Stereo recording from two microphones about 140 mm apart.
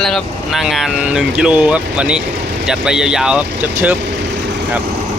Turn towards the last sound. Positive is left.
turn(degrees=-10)  # may be behind; listen again after turning